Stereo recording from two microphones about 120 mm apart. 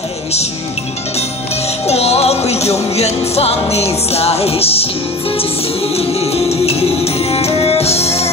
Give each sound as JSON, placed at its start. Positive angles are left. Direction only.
{"t": 1.9, "sound": "music", "side_deg": 60}
{"t": 5.9, "sound": "music", "side_deg": 55}